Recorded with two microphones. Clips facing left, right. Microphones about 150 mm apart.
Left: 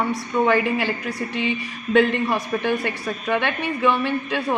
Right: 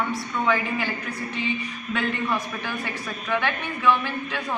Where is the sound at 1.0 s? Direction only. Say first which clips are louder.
Left 5 dB; 80° left.